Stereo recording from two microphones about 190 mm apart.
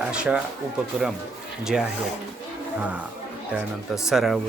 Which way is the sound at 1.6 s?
5° right (ahead or behind).